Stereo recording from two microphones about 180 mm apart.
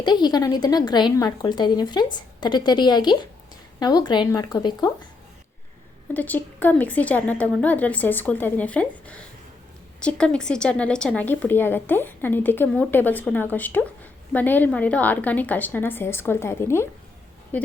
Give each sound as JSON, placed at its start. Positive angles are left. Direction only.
{"t": 0.0, "sound": "a woman's voice", "side_deg": 25}
{"t": 6.1, "sound": "a woman's voice", "side_deg": 10}